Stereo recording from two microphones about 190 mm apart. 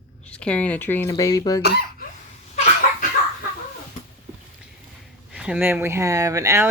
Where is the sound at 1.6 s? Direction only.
55° left (ahead or behind).